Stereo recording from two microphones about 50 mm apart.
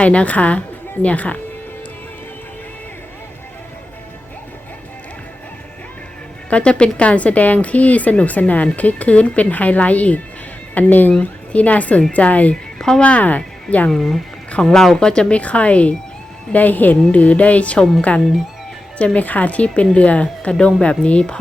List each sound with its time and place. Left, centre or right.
0.0 s a woman's voice: left
6.5 s a woman's voice: left
13.9 s speech: centre
15.4 s a woman's voice: left
18.9 s a woman's voice: left